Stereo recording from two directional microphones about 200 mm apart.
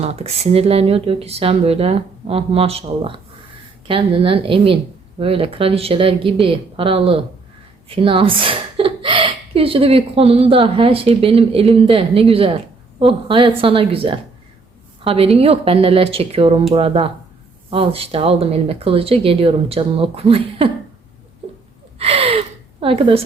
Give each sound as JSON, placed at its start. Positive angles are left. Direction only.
{"t": 0.0, "sound": "a woman's voice", "side_deg": -30}
{"t": 21.4, "sound": "gasp", "side_deg": -25}
{"t": 21.9, "sound": "speech", "side_deg": -30}